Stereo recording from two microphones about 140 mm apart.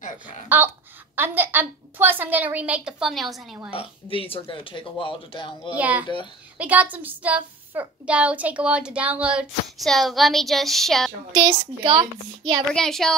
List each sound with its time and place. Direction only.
1.1 s a child's voice: 15° right (ahead or behind)
3.7 s speech: 40° left (ahead or behind)
5.8 s a child's voice: 10° right (ahead or behind)
11.4 s a woman's voice: 30° right (ahead or behind)
12.7 s speech: 5° left (ahead or behind)